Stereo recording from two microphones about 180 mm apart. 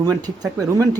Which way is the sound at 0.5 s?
20° right (ahead or behind).